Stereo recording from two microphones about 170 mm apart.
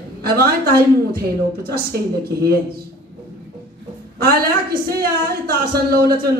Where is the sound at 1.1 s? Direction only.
65° right (ahead or behind).